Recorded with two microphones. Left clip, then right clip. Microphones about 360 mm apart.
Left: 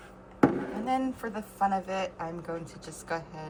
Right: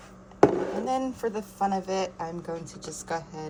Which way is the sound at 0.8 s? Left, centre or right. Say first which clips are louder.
Right 2 dB; centre.